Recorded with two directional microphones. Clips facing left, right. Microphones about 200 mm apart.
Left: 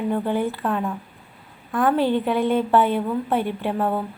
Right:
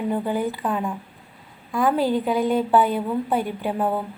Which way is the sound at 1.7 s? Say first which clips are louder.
Left 1 dB; 10° right (ahead or behind).